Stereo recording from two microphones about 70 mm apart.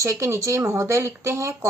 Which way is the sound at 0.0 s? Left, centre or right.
Right.